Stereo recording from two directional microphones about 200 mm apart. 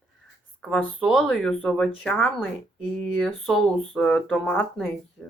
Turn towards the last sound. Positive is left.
turn(degrees=5)  # may be behind; listen again after turning